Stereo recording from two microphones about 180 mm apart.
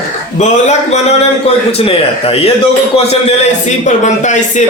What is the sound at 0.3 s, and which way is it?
A man's voice, 40° left (ahead or behind).